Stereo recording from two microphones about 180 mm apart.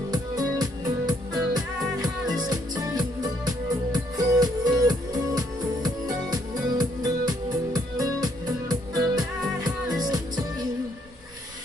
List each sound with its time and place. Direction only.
0.1 s music: 20° right (ahead or behind)